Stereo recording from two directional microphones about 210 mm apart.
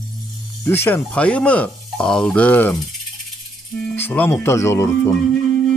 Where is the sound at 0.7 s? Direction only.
10° left (ahead or behind).